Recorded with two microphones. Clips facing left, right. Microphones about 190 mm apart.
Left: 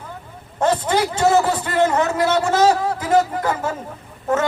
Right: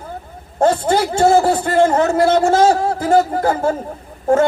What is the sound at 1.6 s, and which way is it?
Speech, 50° right (ahead or behind).